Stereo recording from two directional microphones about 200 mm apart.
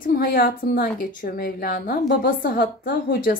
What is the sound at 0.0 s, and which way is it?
A woman's voice, 45° left (ahead or behind).